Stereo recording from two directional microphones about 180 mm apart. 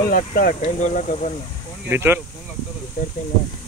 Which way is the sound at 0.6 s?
40° left (ahead or behind).